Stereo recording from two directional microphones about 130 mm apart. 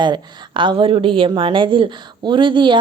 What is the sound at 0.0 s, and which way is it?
A woman's voice, 35° right (ahead or behind).